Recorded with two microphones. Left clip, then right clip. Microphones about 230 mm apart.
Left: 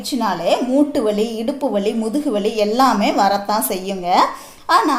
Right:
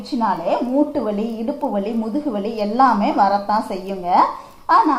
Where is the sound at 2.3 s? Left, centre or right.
Left.